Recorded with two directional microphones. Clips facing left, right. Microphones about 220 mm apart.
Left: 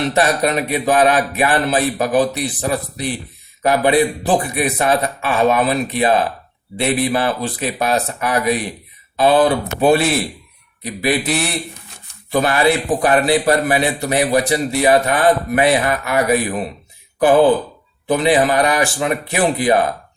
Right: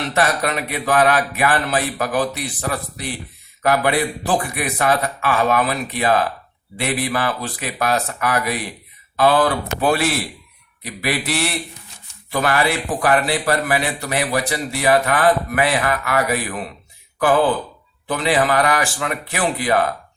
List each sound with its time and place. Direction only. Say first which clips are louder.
0.0 s a man's voice: left 4 dB; 20° left (ahead or behind)